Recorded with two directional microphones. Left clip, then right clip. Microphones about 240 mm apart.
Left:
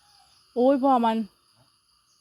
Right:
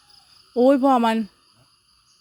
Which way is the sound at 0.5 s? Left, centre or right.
Centre.